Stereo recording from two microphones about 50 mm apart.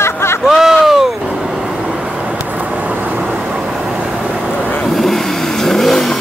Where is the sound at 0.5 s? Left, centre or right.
Centre.